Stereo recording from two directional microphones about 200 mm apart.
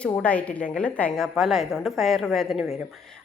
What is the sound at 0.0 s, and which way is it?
A woman's voice, 5° left (ahead or behind).